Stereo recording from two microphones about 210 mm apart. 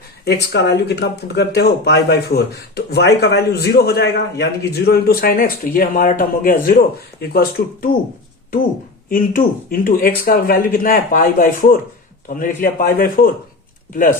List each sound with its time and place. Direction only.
0.3 s speech: 55° left (ahead or behind)
9.0 s speech: 45° left (ahead or behind)